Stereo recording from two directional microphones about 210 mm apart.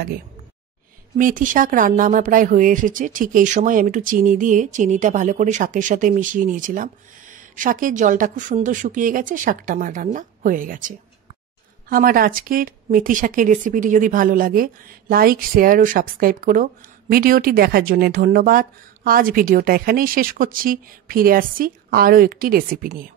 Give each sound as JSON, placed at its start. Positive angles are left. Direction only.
{"t": 1.1, "sound": "a woman's voice", "side_deg": -40}